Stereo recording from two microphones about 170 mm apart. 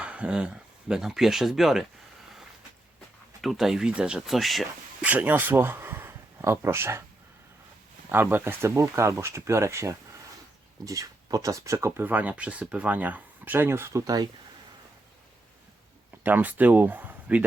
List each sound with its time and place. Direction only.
0.0 s speech: 5° right (ahead or behind)
3.4 s speech: centre (ahead or behind)
8.1 s speech: 15° right (ahead or behind)
16.2 s speech: 10° right (ahead or behind)